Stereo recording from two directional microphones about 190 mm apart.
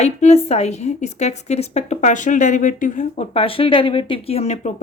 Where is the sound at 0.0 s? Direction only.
35° left (ahead or behind).